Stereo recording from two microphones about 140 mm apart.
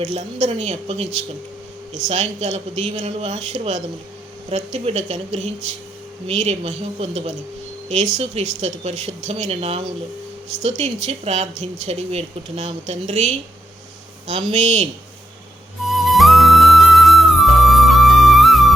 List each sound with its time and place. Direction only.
0.0 s speech: 55° right (ahead or behind)
14.5 s speech: 55° right (ahead or behind)
15.9 s music: centre (ahead or behind)